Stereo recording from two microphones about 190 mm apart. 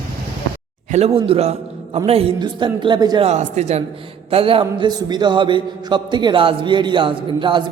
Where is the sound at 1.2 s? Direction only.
30° right (ahead or behind).